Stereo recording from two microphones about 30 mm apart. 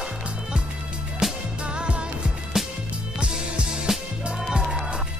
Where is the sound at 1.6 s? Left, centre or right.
Right.